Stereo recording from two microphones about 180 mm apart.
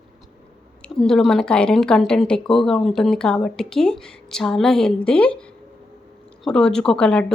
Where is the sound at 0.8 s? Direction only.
5° left (ahead or behind).